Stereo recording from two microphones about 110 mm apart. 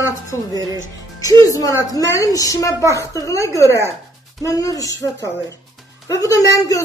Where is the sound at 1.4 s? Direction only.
30° left (ahead or behind).